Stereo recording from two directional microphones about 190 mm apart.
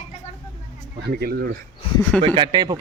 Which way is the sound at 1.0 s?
55° right (ahead or behind).